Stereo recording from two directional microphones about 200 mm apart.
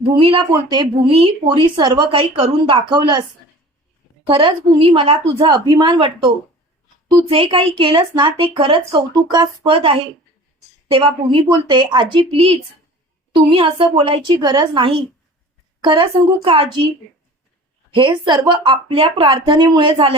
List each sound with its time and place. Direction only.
0.2 s speech: 25° right (ahead or behind)
4.3 s speech: 25° right (ahead or behind)
17.9 s speech: 25° right (ahead or behind)